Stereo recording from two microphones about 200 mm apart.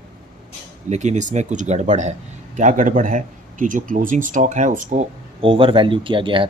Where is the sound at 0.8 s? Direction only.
35° right (ahead or behind).